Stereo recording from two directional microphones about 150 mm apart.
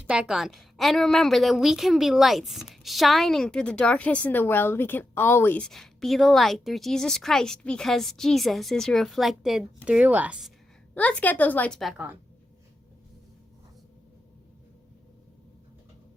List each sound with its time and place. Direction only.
0.1 s a woman's voice: 5° right (ahead or behind)
10.9 s a woman's voice: 10° left (ahead or behind)